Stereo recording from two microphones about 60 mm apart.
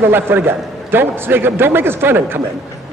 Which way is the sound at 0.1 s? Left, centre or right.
Right.